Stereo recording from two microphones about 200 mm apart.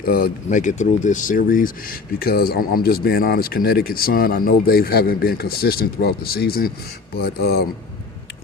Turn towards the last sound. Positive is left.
turn(degrees=50)  # may be behind; listen again after turning